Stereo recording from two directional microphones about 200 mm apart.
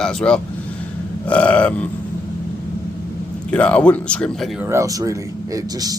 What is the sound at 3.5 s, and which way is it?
Speech, 5° left (ahead or behind).